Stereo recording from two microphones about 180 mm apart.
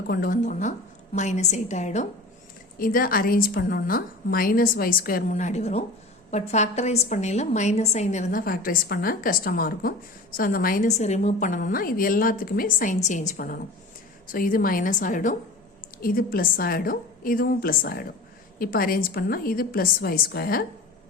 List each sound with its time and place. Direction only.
0.1 s a woman's voice: 50° left (ahead or behind)
2.7 s a woman's voice: 55° left (ahead or behind)